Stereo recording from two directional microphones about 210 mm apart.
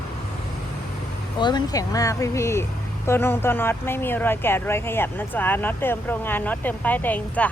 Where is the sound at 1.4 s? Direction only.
20° left (ahead or behind).